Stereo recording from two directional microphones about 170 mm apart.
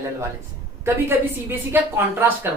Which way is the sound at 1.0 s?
15° right (ahead or behind).